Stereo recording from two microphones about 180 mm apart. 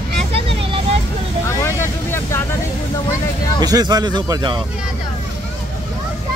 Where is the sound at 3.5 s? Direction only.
20° right (ahead or behind).